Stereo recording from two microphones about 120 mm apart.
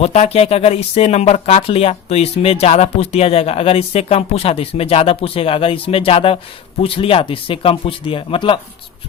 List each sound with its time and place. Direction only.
0.0 s speech: 60° left (ahead or behind)